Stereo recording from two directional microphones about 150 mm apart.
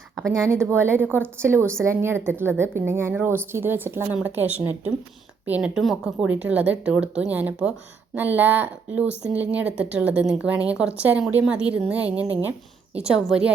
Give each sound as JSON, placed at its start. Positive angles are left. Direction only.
{"t": 0.4, "sound": "a woman's voice", "side_deg": -15}